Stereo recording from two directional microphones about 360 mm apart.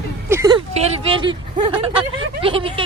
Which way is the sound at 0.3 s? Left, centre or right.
Centre.